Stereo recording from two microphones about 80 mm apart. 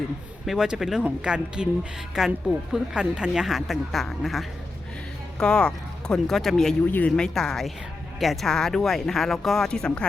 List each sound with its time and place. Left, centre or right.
0.4 s a woman's voice: centre
5.4 s speech: centre
6.9 s speech: centre
7.3 s speech: centre